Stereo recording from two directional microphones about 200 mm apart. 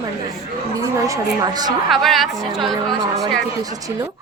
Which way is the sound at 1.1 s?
20° right (ahead or behind).